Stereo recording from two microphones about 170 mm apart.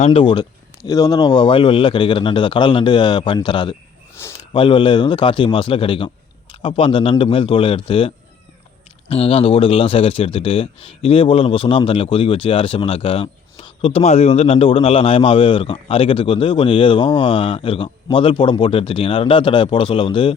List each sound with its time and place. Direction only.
0.0 s speech: 30° left (ahead or behind)
4.2 s speech: 15° left (ahead or behind)
4.5 s speech: 30° left (ahead or behind)